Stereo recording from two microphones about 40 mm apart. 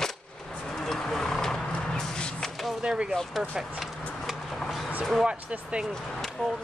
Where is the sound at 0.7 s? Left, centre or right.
Centre.